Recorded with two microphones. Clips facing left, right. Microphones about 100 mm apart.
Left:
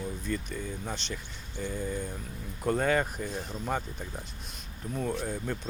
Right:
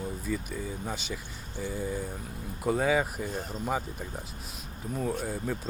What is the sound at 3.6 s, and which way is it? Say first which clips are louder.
Speech: right 1 dB; 5° right (ahead or behind).